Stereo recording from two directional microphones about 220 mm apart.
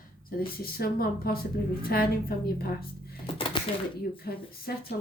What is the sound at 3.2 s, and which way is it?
Speech, 25° left (ahead or behind).